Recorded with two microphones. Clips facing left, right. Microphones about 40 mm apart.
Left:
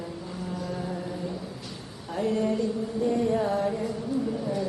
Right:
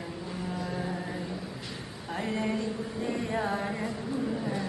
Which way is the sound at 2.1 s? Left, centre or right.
Right.